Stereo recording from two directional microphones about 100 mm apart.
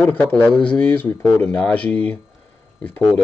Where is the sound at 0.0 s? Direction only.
15° left (ahead or behind).